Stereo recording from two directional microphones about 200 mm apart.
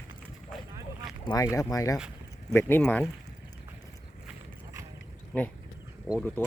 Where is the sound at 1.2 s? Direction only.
15° left (ahead or behind).